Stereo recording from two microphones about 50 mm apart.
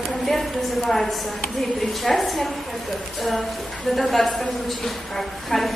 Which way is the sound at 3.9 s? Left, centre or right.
Centre.